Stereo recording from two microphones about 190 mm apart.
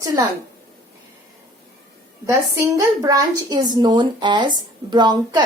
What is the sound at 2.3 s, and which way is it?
A woman's voice, 15° right (ahead or behind).